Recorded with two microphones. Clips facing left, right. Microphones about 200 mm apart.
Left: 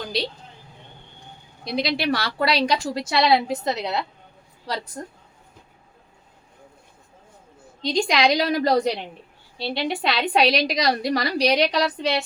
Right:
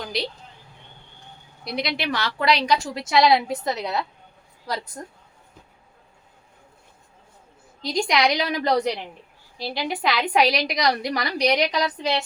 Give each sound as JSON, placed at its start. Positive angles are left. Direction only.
{"t": 1.6, "sound": "a woman's voice", "side_deg": 30}
{"t": 7.8, "sound": "a woman's voice", "side_deg": 30}